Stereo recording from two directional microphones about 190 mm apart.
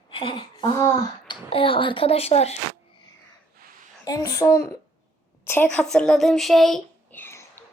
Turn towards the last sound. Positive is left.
turn(degrees=10)  # may be behind; listen again after turning